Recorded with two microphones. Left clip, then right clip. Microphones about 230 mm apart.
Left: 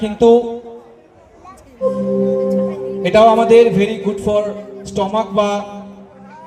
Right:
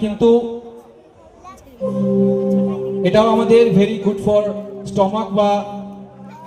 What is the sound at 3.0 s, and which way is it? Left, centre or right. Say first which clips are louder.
Speech: left 5 dB; left.